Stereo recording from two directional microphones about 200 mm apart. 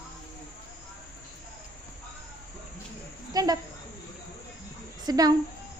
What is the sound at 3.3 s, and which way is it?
Cricket, 20° right (ahead or behind).